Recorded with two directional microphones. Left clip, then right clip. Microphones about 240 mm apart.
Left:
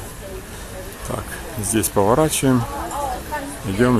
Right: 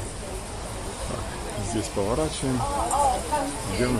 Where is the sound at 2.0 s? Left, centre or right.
Left.